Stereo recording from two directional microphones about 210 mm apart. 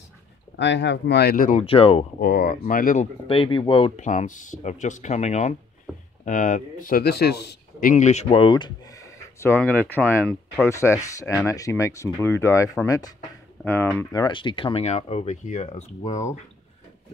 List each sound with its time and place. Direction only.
0.6 s speech: 55° left (ahead or behind); by 1.6 s 40° left (ahead or behind)
1.6 s speech: 25° left (ahead or behind)
2.1 s speech: 45° left (ahead or behind)
3.3 s speech: 25° left (ahead or behind)
6.9 s speech: 50° left (ahead or behind)
7.9 s speech: 35° left (ahead or behind)